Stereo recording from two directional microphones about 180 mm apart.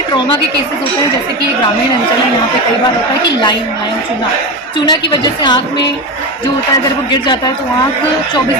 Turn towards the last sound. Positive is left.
turn(degrees=25)  # may be behind; listen again after turning